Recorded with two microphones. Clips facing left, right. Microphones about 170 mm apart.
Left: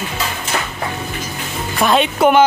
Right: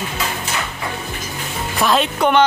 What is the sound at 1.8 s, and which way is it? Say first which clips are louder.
Speech: left 3 dB; centre (ahead or behind).